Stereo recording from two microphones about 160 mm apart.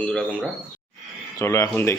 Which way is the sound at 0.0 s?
5° left (ahead or behind).